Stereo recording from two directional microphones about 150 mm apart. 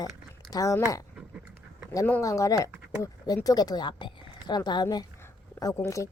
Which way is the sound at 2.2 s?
20° left (ahead or behind).